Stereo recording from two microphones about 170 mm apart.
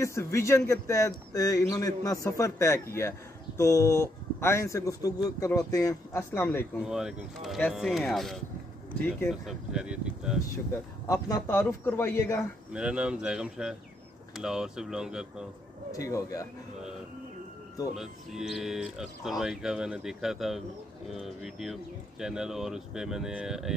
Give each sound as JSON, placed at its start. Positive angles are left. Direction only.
{"t": 0.0, "sound": "speech", "side_deg": 15}
{"t": 6.8, "sound": "speech", "side_deg": -5}
{"t": 11.1, "sound": "speech", "side_deg": 20}
{"t": 12.7, "sound": "speech", "side_deg": -5}
{"t": 15.9, "sound": "speech", "side_deg": 20}
{"t": 17.9, "sound": "speech", "side_deg": 0}